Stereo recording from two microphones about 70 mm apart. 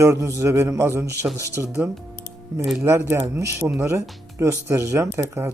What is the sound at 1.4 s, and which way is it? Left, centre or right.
Speech, left.